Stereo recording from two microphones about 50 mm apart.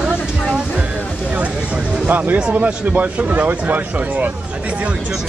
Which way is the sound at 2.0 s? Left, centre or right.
Right.